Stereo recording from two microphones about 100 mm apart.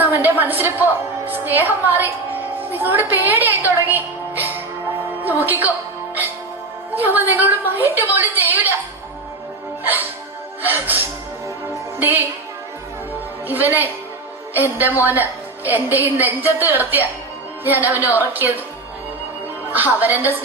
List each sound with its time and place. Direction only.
0.0 s a woman's voice: 20° right (ahead or behind)
6.9 s a woman's voice: 20° right (ahead or behind)
10.6 s a woman's voice: 20° right (ahead or behind)
11.4 s music: 25° right (ahead or behind)
13.5 s a woman's voice: 20° right (ahead or behind)
19.7 s a woman's voice: 20° right (ahead or behind)